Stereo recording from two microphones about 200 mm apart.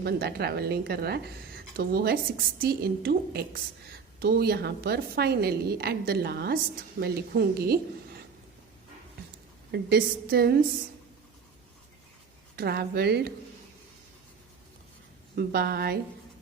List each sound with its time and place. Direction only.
0.0 s a woman's voice: 55° right (ahead or behind)
9.7 s a woman's voice: 50° right (ahead or behind)
12.5 s a woman's voice: 50° right (ahead or behind)
15.4 s a woman's voice: 50° right (ahead or behind)